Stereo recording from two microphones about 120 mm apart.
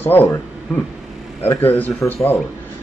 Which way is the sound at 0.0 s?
15° left (ahead or behind).